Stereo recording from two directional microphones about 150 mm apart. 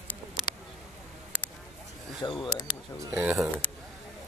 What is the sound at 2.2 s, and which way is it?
Speech, 20° left (ahead or behind).